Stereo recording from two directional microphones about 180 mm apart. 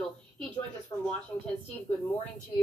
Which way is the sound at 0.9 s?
15° left (ahead or behind).